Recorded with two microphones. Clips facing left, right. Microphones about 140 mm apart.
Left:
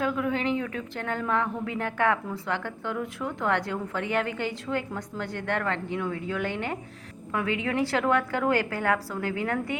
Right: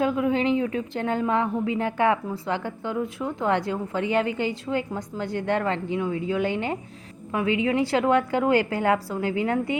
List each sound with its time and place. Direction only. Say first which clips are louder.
0.0 s a woman's voice: right 4 dB; 25° right (ahead or behind)